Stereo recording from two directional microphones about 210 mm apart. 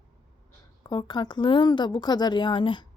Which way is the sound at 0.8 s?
20° left (ahead or behind).